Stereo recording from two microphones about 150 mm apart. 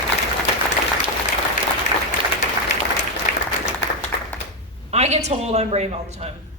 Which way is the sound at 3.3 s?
65° left (ahead or behind).